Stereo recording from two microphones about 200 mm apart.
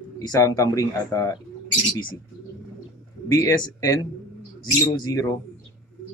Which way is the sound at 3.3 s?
15° left (ahead or behind).